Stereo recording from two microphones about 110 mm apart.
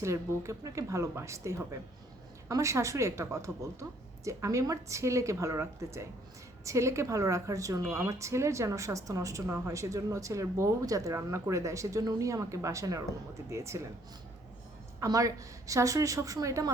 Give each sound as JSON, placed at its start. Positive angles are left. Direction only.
{"t": 0.0, "sound": "speech", "side_deg": -25}
{"t": 15.0, "sound": "a woman's voice", "side_deg": -35}